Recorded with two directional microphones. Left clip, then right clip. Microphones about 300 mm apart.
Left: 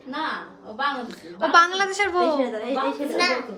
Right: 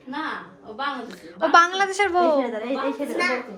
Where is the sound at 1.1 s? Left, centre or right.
Centre.